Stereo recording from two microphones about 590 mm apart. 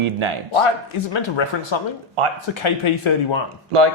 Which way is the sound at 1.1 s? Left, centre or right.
Left.